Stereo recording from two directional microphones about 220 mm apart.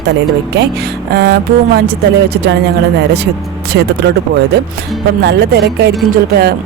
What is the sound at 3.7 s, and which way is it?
Speech, 50° right (ahead or behind).